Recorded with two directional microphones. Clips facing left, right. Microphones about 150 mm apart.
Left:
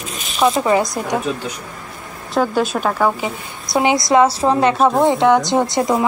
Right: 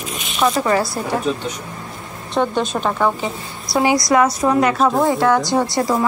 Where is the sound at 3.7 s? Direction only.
25° left (ahead or behind).